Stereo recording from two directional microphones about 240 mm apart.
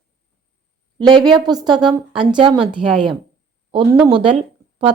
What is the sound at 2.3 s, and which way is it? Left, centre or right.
Speech, centre.